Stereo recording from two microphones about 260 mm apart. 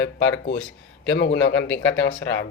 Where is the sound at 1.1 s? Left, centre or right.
Left.